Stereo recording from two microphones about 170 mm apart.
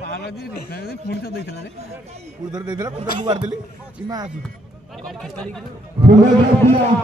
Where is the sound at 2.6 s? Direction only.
25° right (ahead or behind).